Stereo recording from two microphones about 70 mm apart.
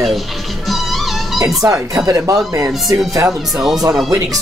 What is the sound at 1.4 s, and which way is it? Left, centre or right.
Speech, right.